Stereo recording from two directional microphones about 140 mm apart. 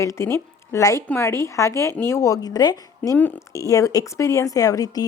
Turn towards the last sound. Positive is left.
turn(degrees=25)  # may be behind; listen again after turning